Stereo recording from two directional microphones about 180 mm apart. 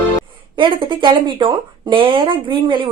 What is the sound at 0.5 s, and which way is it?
Speech, 25° right (ahead or behind).